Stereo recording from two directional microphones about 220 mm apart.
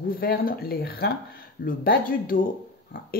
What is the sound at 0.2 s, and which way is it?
Speech, 45° left (ahead or behind).